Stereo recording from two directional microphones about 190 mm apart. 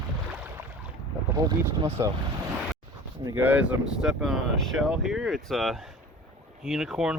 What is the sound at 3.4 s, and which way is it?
Speech, 5° right (ahead or behind).